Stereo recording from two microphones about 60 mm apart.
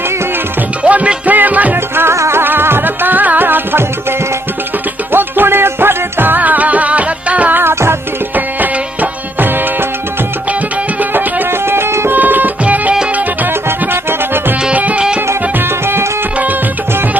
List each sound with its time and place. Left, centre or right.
0.8 s music: right
2.1 s music: right
2.4 s music: right
5.1 s music: right
7.6 s music: right
8.6 s music: right
11.1 s music: right
12.1 s music: right
13.7 s music: right
14.6 s music: right